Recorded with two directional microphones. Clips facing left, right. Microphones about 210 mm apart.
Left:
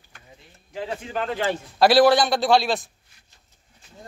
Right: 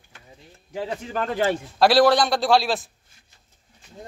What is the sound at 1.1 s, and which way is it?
Speech, 40° right (ahead or behind).